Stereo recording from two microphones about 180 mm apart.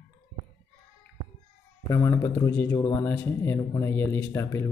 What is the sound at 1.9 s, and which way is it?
Speech, 15° left (ahead or behind).